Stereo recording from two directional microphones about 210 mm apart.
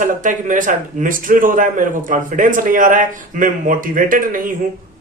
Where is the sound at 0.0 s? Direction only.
40° right (ahead or behind).